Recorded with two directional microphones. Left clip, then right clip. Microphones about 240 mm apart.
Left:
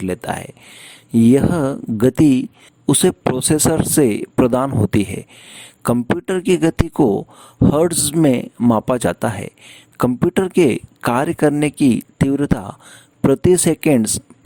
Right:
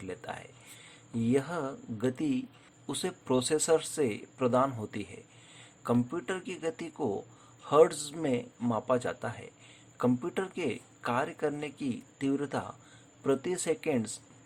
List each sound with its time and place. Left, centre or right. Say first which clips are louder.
0.0 s speech: left 17 dB; left